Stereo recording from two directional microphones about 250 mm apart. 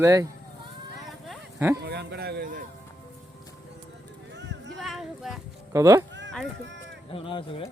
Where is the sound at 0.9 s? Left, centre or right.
Centre.